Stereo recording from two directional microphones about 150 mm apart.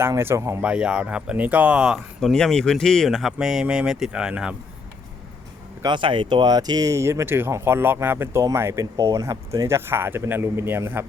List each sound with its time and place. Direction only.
0.0 s speech: 15° right (ahead or behind)
0.6 s speech: 5° right (ahead or behind)
5.8 s speech: 30° right (ahead or behind); by 11.0 s 15° right (ahead or behind)